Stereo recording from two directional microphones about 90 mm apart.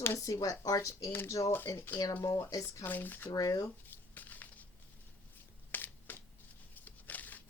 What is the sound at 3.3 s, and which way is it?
Speech, 45° left (ahead or behind).